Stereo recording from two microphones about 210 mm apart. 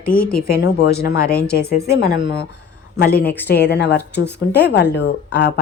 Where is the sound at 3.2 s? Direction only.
50° left (ahead or behind).